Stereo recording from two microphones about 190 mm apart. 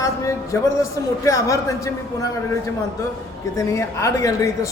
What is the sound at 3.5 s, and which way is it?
A man's voice, 15° left (ahead or behind).